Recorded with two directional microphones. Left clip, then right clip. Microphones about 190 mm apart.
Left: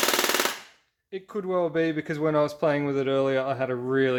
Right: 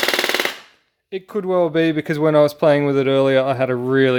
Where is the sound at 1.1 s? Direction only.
45° right (ahead or behind).